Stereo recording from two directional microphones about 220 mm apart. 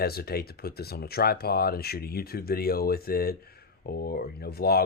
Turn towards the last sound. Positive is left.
turn(degrees=45)  # may be behind; listen again after turning